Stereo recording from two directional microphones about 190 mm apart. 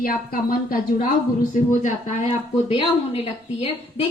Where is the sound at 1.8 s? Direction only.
40° left (ahead or behind).